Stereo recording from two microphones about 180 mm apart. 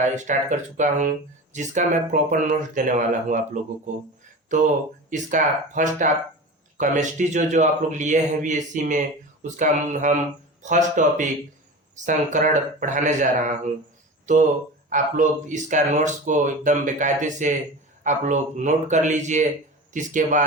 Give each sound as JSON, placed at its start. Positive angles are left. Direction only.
{"t": 0.0, "sound": "speech", "side_deg": -40}
{"t": 14.3, "sound": "speech", "side_deg": -45}